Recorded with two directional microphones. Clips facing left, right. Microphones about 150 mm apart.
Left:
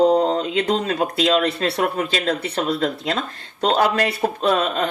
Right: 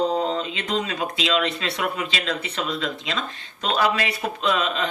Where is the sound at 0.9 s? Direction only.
50° left (ahead or behind).